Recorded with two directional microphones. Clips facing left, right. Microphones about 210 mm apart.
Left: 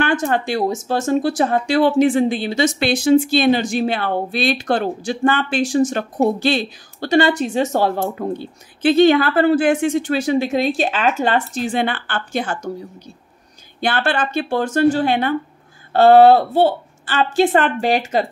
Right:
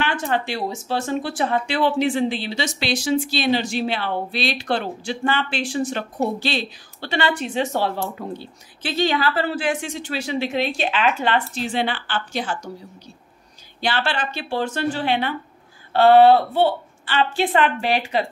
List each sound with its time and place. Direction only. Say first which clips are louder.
0.0 s speech: left 5 dB; 45° left (ahead or behind)
13.7 s speech: left 4 dB; 50° left (ahead or behind)